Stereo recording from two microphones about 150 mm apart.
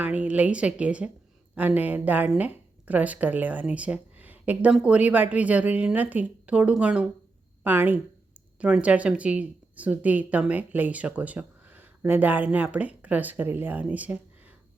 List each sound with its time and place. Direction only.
0.0 s speech: 10° right (ahead or behind)